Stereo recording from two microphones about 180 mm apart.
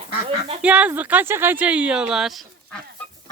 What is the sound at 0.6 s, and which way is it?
Speech, 10° right (ahead or behind).